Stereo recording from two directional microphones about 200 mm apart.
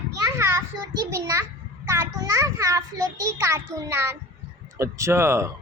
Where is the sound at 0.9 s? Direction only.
15° right (ahead or behind).